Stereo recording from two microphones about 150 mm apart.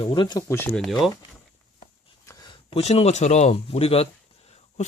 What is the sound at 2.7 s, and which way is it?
Speech, 40° left (ahead or behind).